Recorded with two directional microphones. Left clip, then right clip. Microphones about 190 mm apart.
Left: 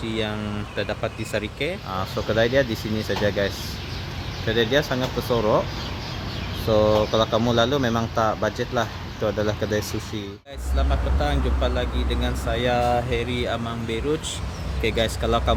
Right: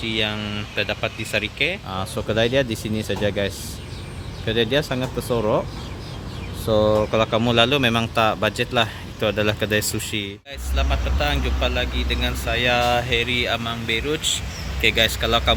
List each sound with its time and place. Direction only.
0.0 s speech: centre (ahead or behind)
2.1 s speech: 25° right (ahead or behind)
5.3 s speech: 10° right (ahead or behind)
6.8 s speech: 5° right (ahead or behind)
7.1 s speech: 20° right (ahead or behind)
10.8 s speech: 10° left (ahead or behind)